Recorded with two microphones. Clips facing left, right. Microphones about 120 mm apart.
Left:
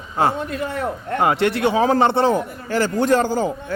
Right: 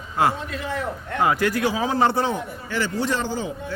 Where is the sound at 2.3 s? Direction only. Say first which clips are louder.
Left 7 dB; 45° left (ahead or behind).